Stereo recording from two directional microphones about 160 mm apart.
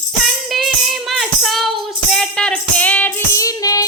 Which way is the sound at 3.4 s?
20° left (ahead or behind).